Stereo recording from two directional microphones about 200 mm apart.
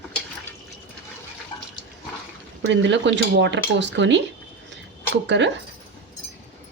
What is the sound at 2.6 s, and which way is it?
Speech, 65° right (ahead or behind).